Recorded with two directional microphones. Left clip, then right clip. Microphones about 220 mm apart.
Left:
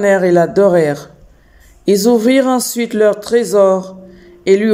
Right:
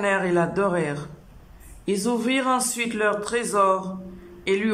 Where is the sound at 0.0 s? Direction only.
25° left (ahead or behind).